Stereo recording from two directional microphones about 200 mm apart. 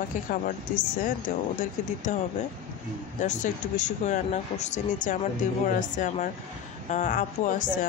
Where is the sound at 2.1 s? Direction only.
35° left (ahead or behind).